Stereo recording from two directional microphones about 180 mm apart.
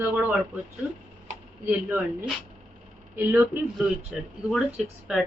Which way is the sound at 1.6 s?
10° right (ahead or behind).